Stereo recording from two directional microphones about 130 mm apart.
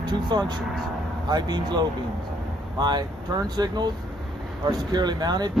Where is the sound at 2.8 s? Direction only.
35° right (ahead or behind).